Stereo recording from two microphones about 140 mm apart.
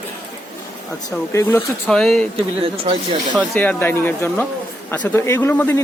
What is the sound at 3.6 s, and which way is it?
Speech, 15° left (ahead or behind).